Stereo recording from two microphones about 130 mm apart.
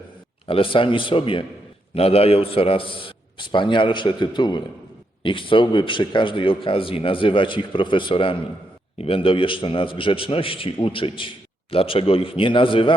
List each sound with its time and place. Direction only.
0.4 s a man's voice: 45° left (ahead or behind)